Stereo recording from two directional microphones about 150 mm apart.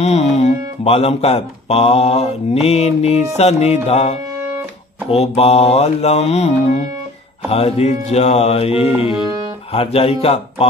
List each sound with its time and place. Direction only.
0.0 s a man's voice: 45° left (ahead or behind)